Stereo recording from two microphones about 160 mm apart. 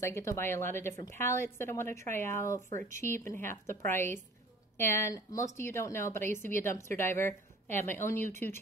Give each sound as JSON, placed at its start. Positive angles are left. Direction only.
{"t": 0.0, "sound": "a woman's voice", "side_deg": 15}